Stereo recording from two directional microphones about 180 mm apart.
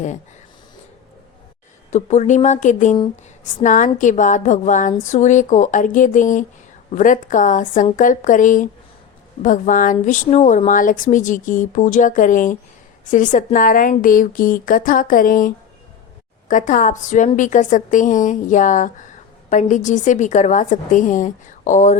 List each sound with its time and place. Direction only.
1.9 s a woman's voice: 40° left (ahead or behind)